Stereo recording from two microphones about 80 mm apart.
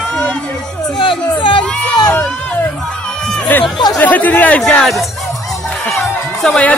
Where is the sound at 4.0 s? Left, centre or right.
Left.